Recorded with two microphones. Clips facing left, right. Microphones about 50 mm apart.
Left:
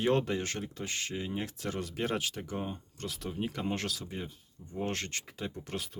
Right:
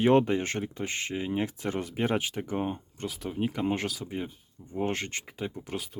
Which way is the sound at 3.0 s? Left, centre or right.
Centre.